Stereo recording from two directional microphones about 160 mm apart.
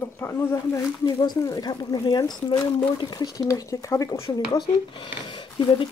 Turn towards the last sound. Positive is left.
turn(degrees=30)  # may be behind; listen again after turning